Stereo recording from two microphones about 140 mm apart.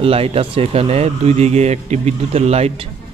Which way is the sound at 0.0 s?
45° right (ahead or behind).